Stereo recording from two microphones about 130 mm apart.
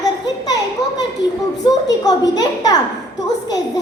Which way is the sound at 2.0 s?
30° left (ahead or behind).